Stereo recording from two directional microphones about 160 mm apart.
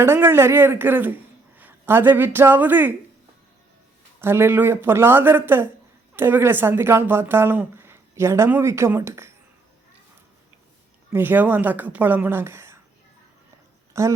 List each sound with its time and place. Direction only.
0.0 s a man's voice: 15° right (ahead or behind)
4.2 s speech: 15° right (ahead or behind)
11.1 s speech: 10° right (ahead or behind)
14.0 s speech: 20° right (ahead or behind)